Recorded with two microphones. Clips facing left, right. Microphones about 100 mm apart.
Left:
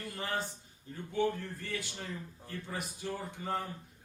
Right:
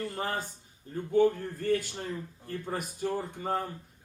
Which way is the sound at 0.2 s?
45° right (ahead or behind).